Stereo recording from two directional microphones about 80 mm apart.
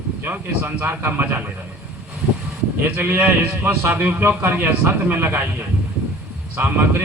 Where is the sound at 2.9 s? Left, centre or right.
Right.